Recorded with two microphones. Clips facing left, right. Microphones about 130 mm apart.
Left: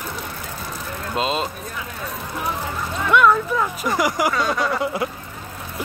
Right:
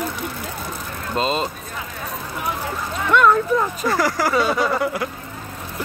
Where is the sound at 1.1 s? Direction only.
5° left (ahead or behind).